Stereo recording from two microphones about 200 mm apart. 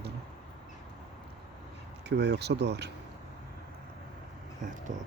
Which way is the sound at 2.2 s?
55° right (ahead or behind).